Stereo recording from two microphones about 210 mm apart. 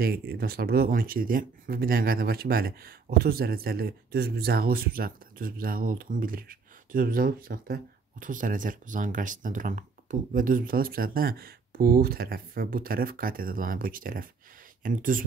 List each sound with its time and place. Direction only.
0.0 s speech: 45° right (ahead or behind)